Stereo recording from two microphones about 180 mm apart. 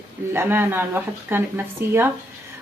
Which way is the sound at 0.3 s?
15° right (ahead or behind).